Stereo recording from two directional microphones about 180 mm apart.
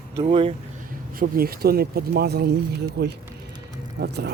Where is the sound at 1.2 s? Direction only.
55° right (ahead or behind).